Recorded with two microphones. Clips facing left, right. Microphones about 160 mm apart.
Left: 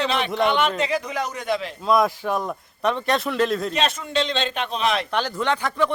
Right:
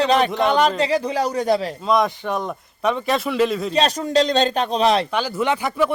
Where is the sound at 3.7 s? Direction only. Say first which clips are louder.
Right 5 dB; 35° right (ahead or behind).